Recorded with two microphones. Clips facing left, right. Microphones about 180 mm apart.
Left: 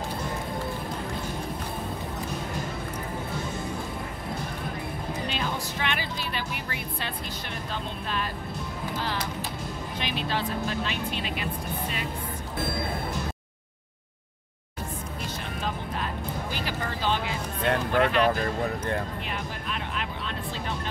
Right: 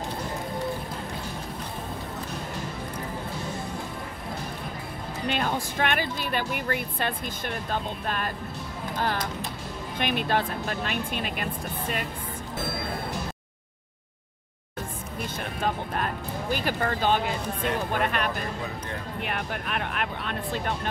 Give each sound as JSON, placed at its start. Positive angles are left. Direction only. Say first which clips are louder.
{"t": 5.3, "sound": "speech", "louder": "right 3 dB", "side_deg": -55}
{"t": 8.9, "sound": "music", "louder": "right 4 dB", "side_deg": -50}
{"t": 9.9, "sound": "speech", "louder": "right 5 dB", "side_deg": -55}
{"t": 15.6, "sound": "music", "louder": "right 5 dB", "side_deg": -55}
{"t": 16.5, "sound": "a sound", "louder": "right 4 dB", "side_deg": -50}
{"t": 19.2, "sound": "vehicle", "louder": "right 2 dB", "side_deg": -60}